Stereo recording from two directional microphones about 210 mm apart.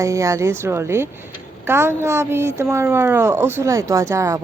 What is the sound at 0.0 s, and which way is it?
Speech, 15° right (ahead or behind).